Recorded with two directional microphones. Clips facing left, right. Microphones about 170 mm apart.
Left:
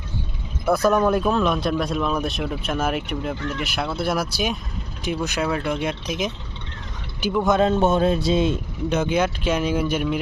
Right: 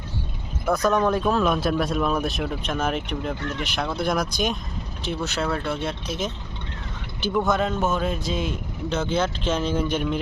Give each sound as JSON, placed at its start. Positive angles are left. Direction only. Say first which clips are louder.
{"t": 0.6, "sound": "speech", "louder": "left 3 dB", "side_deg": 10}
{"t": 7.4, "sound": "a man's voice", "louder": "left 8 dB", "side_deg": 25}
{"t": 8.9, "sound": "speech", "louder": "left 3 dB", "side_deg": 15}